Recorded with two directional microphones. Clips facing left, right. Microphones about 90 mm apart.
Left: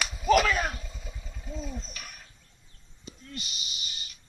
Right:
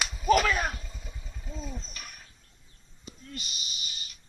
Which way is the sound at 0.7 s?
Centre (ahead or behind).